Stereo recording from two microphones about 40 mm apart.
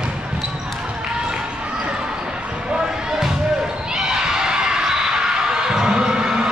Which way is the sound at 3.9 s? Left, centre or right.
Centre.